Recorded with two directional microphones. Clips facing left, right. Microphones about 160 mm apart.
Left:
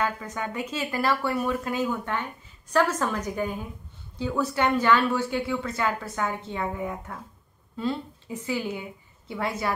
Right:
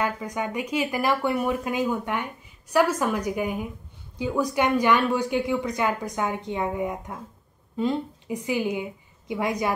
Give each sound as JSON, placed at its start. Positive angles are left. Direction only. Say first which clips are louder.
{"t": 0.0, "sound": "speech", "louder": "right 2 dB", "side_deg": -15}